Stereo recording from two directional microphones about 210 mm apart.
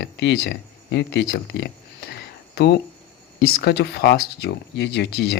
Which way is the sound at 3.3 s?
45° left (ahead or behind).